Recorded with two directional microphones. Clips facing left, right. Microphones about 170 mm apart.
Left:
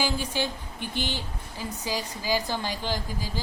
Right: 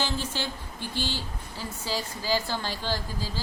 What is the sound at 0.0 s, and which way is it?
A woman's voice, 15° left (ahead or behind).